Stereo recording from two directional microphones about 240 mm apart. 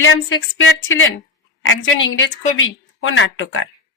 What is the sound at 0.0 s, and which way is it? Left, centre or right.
A woman's voice, left.